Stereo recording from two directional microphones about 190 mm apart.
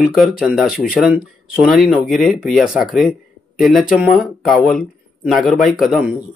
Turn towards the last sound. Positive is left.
turn(degrees=-5)  # may be behind; listen again after turning